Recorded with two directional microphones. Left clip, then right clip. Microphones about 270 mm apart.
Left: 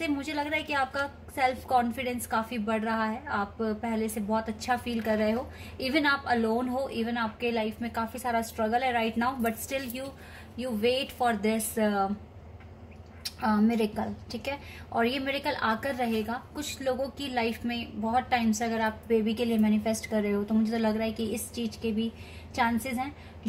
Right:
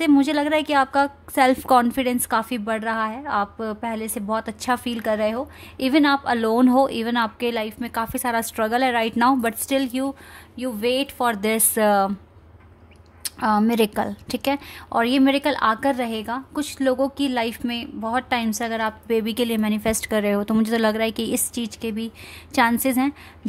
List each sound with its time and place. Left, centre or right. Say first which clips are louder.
0.0 s a woman's voice: right 12 dB; right
13.2 s a woman's voice: right 7 dB; right